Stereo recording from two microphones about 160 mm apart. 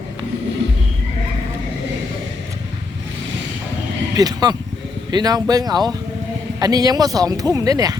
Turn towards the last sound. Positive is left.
turn(degrees=-25)  # may be behind; listen again after turning